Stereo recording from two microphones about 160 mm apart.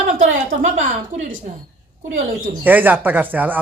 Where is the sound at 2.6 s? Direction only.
10° right (ahead or behind).